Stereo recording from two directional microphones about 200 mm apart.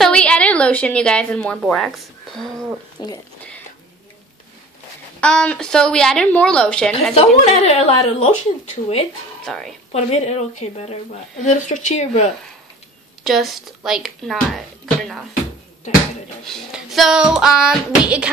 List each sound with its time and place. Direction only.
0.0 s a woman's voice: 5° left (ahead or behind)
3.0 s speech: 20° left (ahead or behind)
5.2 s a woman's voice: 5° left (ahead or behind)
7.2 s a woman's voice: 30° left (ahead or behind)
9.4 s a woman's voice: centre (ahead or behind)
9.9 s a woman's voice: 35° left (ahead or behind)
13.2 s a woman's voice: centre (ahead or behind)
16.4 s a woman's voice: centre (ahead or behind)